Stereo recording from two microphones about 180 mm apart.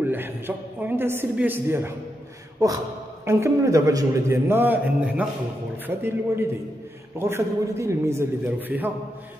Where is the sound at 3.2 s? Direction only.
15° right (ahead or behind).